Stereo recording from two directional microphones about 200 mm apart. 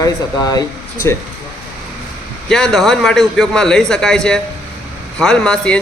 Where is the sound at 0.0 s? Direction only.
20° left (ahead or behind).